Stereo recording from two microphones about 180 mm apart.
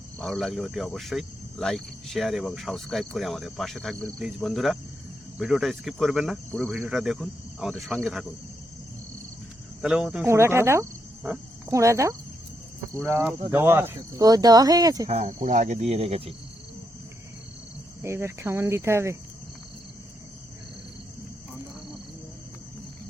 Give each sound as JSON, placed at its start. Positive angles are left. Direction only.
{"t": 0.2, "sound": "cricket", "side_deg": 0}
{"t": 9.8, "sound": "cricket", "side_deg": -5}
{"t": 10.2, "sound": "speech", "side_deg": -15}
{"t": 13.0, "sound": "cricket", "side_deg": -15}
{"t": 13.5, "sound": "speech", "side_deg": -10}
{"t": 15.1, "sound": "speech", "side_deg": -45}
{"t": 18.0, "sound": "cricket", "side_deg": -15}